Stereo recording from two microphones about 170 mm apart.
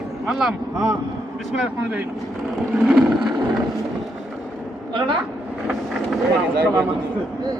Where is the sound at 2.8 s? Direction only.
5° right (ahead or behind).